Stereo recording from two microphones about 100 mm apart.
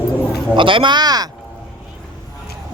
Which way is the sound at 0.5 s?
55° right (ahead or behind).